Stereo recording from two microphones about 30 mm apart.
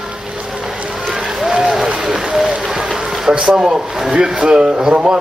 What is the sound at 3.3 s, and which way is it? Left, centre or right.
Speech, right.